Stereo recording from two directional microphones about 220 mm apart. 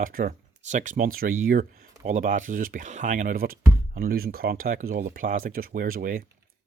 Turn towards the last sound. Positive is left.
turn(degrees=-40)  # may be behind; listen again after turning